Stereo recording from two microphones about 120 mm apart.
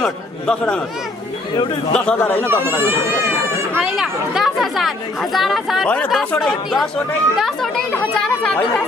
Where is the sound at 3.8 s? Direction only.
5° right (ahead or behind).